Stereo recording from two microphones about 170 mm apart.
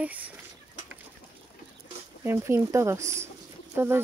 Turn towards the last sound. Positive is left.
turn(degrees=-15)  # may be behind; listen again after turning